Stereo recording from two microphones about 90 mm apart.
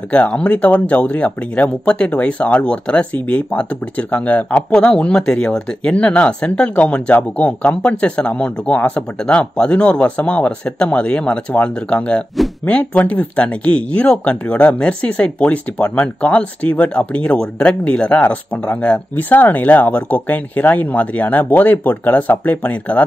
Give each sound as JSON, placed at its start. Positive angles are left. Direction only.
{"t": 0.1, "sound": "speech", "side_deg": 15}